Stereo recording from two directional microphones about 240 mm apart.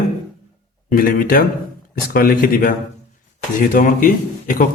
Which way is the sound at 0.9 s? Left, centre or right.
Left.